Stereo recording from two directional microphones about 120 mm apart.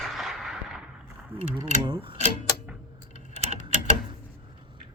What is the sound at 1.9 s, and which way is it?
Speech, 45° right (ahead or behind).